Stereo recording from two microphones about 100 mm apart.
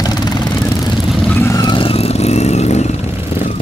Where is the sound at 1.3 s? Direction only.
25° left (ahead or behind).